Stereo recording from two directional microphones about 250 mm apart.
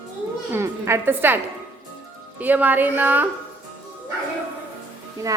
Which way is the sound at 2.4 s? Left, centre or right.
Centre.